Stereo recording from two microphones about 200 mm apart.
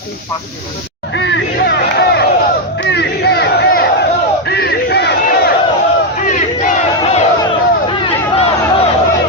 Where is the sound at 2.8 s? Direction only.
60° left (ahead or behind).